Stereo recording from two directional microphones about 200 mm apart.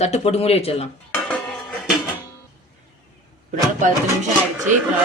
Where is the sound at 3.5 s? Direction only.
40° right (ahead or behind).